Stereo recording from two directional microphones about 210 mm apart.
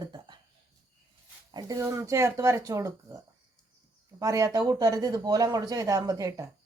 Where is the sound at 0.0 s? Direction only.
20° right (ahead or behind).